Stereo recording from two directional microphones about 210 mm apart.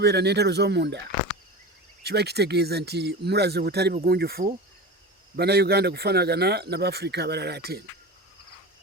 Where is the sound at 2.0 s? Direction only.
50° right (ahead or behind).